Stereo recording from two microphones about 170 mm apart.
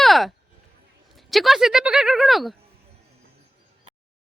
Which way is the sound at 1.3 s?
Centre (ahead or behind).